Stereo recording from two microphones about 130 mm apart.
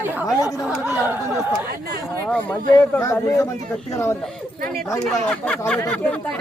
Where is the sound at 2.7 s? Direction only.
20° left (ahead or behind).